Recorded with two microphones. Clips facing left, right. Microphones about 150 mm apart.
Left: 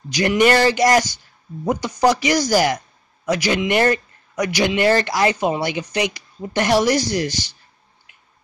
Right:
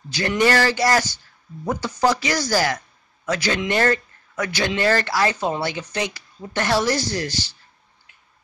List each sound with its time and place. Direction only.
0.1 s speech: 15° left (ahead or behind)